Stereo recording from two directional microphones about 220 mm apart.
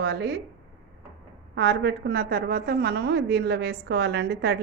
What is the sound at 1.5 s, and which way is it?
A woman's voice, 50° right (ahead or behind).